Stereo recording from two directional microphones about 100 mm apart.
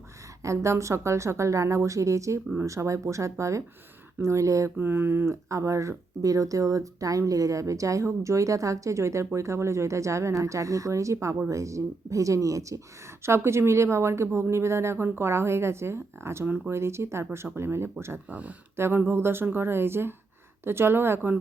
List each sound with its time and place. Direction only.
0.4 s speech: 30° right (ahead or behind)